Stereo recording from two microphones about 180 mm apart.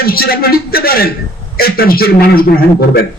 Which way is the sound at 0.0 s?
55° left (ahead or behind).